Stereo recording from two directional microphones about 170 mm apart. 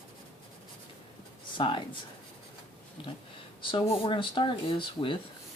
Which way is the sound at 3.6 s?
30° left (ahead or behind).